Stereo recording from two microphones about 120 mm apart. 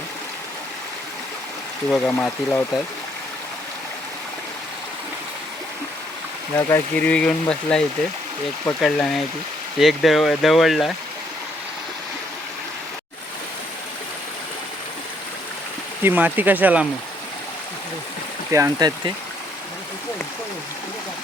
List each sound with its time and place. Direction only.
1.9 s speech: 10° left (ahead or behind)
6.7 s speech: 15° left (ahead or behind); by 10.9 s centre (ahead or behind)
16.0 s speech: 15° right (ahead or behind)
18.5 s speech: 30° right (ahead or behind)